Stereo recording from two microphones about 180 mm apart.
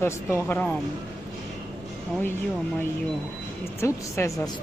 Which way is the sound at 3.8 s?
15° left (ahead or behind).